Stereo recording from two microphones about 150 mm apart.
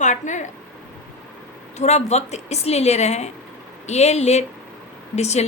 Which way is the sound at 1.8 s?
50° left (ahead or behind).